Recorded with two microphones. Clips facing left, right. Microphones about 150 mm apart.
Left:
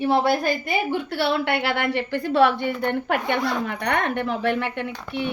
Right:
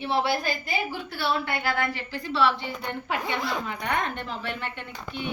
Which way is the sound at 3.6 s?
65° left (ahead or behind).